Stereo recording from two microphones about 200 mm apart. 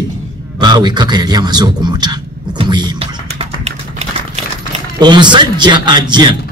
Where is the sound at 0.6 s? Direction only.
20° right (ahead or behind).